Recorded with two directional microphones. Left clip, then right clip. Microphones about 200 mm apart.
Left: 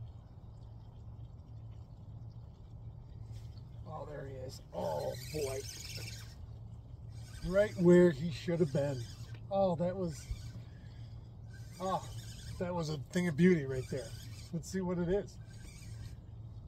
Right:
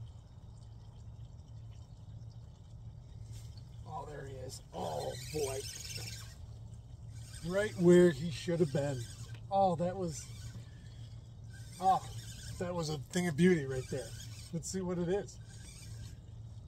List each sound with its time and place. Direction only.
3.9 s roaring cats: 25° right (ahead or behind)
7.5 s speech: 25° right (ahead or behind)
11.8 s speech: 20° right (ahead or behind)